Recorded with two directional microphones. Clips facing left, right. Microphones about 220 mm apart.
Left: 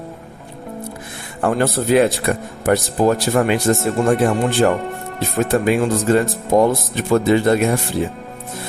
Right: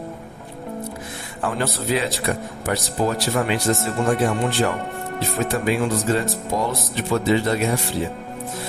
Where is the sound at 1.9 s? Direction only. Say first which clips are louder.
Left 8 dB; 55° left (ahead or behind).